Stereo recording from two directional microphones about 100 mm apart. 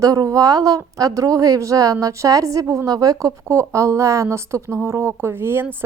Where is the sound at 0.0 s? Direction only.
35° right (ahead or behind).